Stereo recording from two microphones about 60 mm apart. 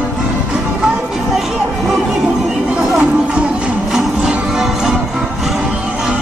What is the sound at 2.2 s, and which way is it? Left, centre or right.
Music, centre.